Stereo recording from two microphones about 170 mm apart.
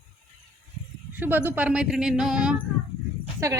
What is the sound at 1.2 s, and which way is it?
A woman's voice, 10° right (ahead or behind).